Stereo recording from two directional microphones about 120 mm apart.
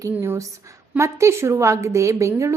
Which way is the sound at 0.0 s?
25° right (ahead or behind).